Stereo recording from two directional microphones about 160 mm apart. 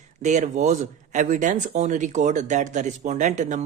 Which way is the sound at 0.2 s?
50° right (ahead or behind).